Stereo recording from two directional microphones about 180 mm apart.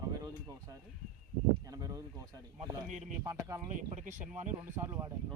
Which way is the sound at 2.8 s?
40° right (ahead or behind).